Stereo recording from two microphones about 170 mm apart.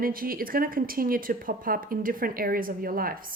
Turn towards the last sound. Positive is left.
turn(degrees=-55)  # may be behind; listen again after turning